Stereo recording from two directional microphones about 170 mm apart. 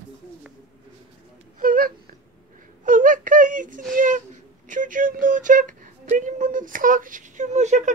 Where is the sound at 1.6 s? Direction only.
55° right (ahead or behind).